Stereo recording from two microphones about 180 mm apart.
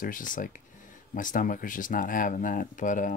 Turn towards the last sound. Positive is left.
turn(degrees=45)  # may be behind; listen again after turning